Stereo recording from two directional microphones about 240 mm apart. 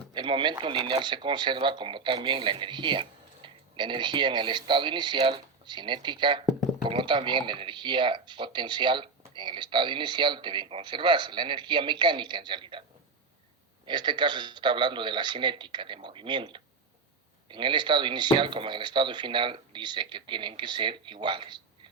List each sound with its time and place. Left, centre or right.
0.1 s speech: centre
13.8 s speech: centre